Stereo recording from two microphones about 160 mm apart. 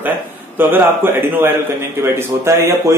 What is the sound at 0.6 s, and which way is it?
A man's voice, 15° right (ahead or behind).